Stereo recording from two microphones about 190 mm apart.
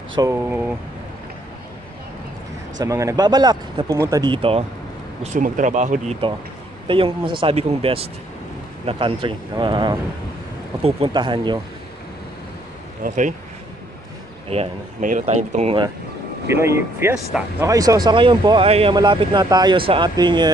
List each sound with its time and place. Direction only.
0.1 s speech: 15° right (ahead or behind)
2.8 s speech: 15° right (ahead or behind)
5.2 s speech: 40° right (ahead or behind)
6.9 s speech: 25° right (ahead or behind)
13.0 s speech: 40° right (ahead or behind)
14.5 s speech: 40° right (ahead or behind)
16.4 s speech: 15° right (ahead or behind)